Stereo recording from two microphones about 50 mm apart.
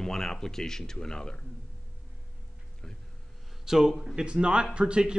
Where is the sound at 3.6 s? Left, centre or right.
Centre.